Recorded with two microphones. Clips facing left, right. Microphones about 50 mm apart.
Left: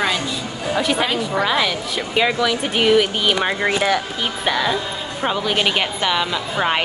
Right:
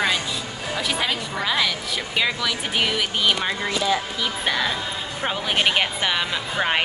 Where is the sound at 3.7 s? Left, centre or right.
Left.